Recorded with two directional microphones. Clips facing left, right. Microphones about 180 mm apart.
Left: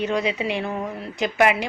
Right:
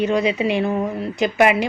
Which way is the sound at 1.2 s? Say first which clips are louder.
Right 3 dB; 15° right (ahead or behind).